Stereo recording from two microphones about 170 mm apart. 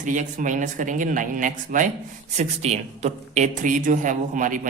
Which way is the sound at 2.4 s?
40° right (ahead or behind).